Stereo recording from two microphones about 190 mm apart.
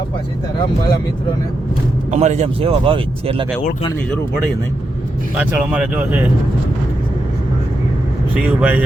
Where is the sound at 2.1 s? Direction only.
35° right (ahead or behind).